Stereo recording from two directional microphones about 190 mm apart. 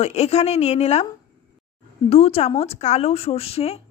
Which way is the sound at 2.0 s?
30° left (ahead or behind).